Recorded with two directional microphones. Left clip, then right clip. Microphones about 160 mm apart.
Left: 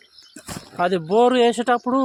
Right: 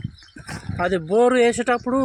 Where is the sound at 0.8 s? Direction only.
15° left (ahead or behind).